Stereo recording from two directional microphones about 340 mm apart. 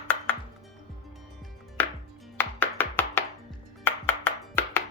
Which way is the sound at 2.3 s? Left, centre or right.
Centre.